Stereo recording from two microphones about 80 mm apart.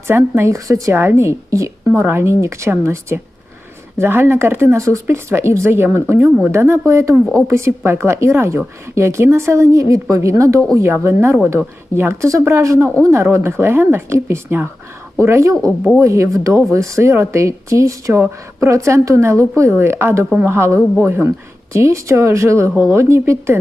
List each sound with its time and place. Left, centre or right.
0.1 s a woman's voice: right
6.1 s speech: right
6.5 s a woman's voice: right